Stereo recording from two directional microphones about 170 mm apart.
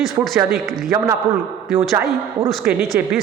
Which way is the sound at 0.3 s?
5° right (ahead or behind).